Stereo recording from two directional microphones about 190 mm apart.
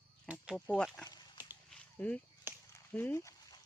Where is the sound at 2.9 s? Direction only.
10° left (ahead or behind).